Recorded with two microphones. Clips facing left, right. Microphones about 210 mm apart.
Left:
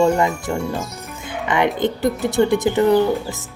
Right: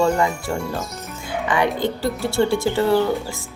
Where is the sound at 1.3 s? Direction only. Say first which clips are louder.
Left 1 dB; 20° left (ahead or behind).